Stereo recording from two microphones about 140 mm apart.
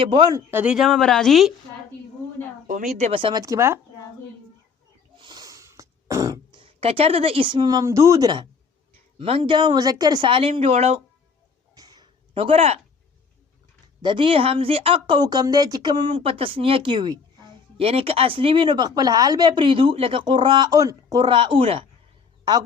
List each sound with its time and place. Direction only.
0.0 s speech: 40° right (ahead or behind)
0.3 s speech: 10° right (ahead or behind)
2.6 s speech: 70° right (ahead or behind); by 3.2 s 55° right (ahead or behind)
3.2 s speech: 40° right (ahead or behind)
3.4 s speech: 20° right (ahead or behind)
5.1 s a sound: 30° right (ahead or behind)
6.6 s speech: 45° right (ahead or behind); by 8.4 s 30° right (ahead or behind)
9.1 s speech: 45° right (ahead or behind)
11.7 s a sound: 30° right (ahead or behind)
12.3 s speech: 40° right (ahead or behind)
14.0 s speech: 35° right (ahead or behind)